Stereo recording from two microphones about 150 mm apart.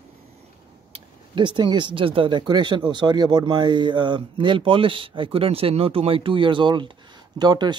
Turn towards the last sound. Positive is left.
turn(degrees=-30)  # may be behind; listen again after turning